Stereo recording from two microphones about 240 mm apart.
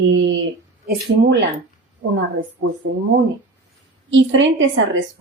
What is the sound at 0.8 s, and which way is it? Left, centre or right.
Speech, right.